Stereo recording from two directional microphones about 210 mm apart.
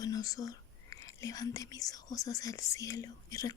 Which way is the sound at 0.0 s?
15° left (ahead or behind).